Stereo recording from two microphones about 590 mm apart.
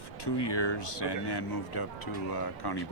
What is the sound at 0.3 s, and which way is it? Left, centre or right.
Speech, left.